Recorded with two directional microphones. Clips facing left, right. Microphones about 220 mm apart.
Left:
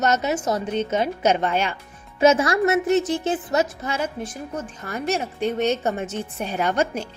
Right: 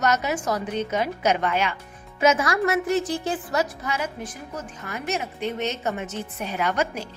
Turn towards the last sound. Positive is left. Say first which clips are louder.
# left 3 dB
turn(degrees=30)  # may be behind; listen again after turning